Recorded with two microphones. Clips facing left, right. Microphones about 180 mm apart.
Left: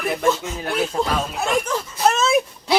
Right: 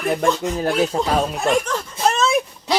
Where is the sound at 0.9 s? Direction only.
35° right (ahead or behind).